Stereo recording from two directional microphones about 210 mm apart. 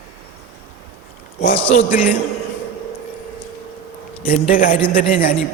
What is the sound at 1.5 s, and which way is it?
Speech, 35° left (ahead or behind).